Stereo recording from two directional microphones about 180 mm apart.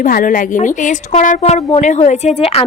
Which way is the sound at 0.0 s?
50° left (ahead or behind).